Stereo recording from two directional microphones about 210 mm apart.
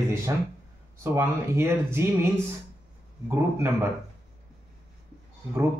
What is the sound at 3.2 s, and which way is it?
Speech, 10° right (ahead or behind).